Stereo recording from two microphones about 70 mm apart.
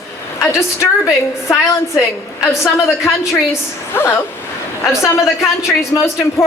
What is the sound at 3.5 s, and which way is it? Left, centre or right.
Speech, left.